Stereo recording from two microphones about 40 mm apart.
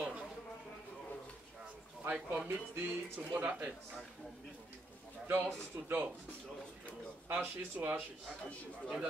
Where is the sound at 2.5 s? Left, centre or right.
Right.